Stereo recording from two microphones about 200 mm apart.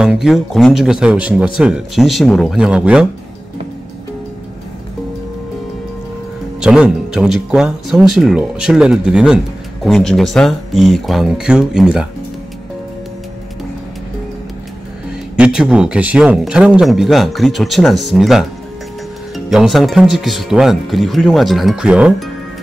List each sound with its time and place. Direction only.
0.0 s speech: centre (ahead or behind)
6.6 s speech: 5° right (ahead or behind)
15.3 s speech: 5° right (ahead or behind)